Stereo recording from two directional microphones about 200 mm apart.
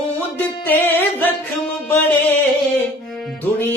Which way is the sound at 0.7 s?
10° left (ahead or behind).